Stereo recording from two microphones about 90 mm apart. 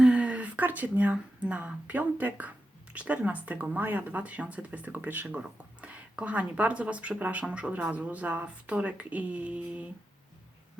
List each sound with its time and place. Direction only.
0.0 s speech: 10° right (ahead or behind)